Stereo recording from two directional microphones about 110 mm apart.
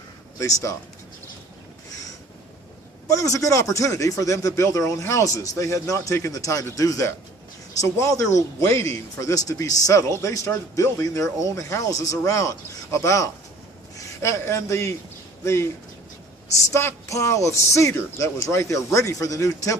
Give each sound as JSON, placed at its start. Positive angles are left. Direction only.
{"t": 0.3, "sound": "speech", "side_deg": 30}
{"t": 3.1, "sound": "speech", "side_deg": 30}
{"t": 16.7, "sound": "speech", "side_deg": 25}